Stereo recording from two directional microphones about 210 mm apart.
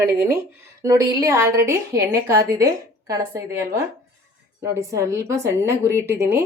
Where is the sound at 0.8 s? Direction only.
15° right (ahead or behind).